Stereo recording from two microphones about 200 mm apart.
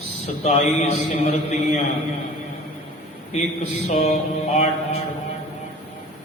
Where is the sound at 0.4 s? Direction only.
35° left (ahead or behind).